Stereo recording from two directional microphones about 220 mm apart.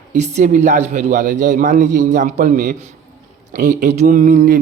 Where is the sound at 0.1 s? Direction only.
35° right (ahead or behind).